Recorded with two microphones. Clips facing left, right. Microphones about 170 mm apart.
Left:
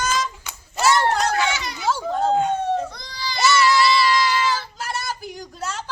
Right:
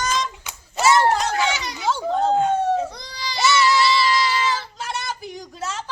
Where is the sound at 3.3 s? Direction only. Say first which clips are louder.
Left 1 dB; centre (ahead or behind).